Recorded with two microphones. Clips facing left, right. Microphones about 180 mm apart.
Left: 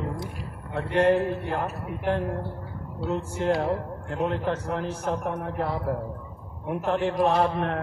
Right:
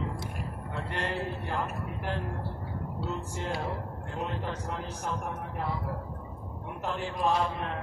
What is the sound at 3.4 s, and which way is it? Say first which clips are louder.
A man's voice: left 11 dB; 65° left (ahead or behind).